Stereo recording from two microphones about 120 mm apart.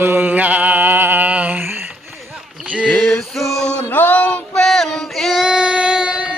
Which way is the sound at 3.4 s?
Centre (ahead or behind).